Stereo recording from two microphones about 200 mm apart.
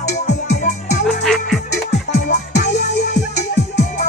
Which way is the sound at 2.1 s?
40° left (ahead or behind).